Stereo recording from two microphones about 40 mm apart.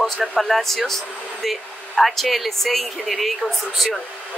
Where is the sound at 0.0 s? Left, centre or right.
Centre.